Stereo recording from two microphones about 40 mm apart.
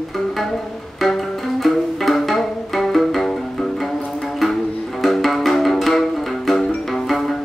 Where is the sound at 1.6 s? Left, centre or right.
Centre.